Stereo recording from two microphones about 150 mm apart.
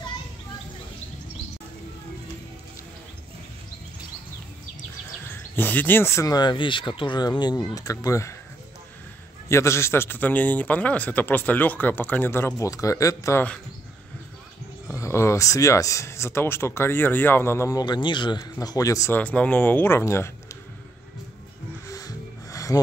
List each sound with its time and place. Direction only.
5.3 s speech: 10° left (ahead or behind)
9.5 s a man's voice: 20° left (ahead or behind)
14.9 s speech: 20° left (ahead or behind)
19.1 s a man's voice: 10° left (ahead or behind)
21.8 s music: 20° left (ahead or behind)